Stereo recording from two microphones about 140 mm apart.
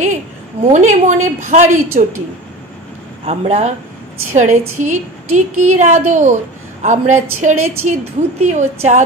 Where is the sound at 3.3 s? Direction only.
55° right (ahead or behind).